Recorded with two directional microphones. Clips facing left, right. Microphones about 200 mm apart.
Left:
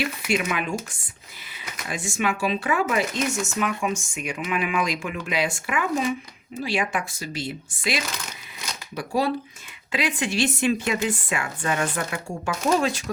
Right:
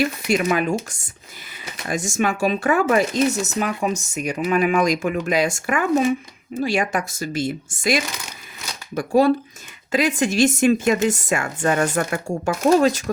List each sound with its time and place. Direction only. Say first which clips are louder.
0.0 s speech: right 5 dB; 40° right (ahead or behind)
3.2 s speech: right 5 dB; 35° right (ahead or behind)